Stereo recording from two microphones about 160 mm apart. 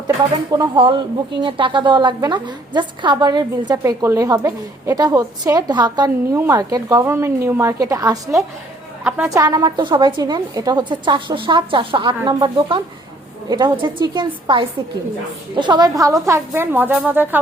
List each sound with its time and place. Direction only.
0.5 s a woman's voice: 25° right (ahead or behind)
9.0 s a woman's voice: 10° right (ahead or behind)
9.3 s a woman's voice: 25° right (ahead or behind)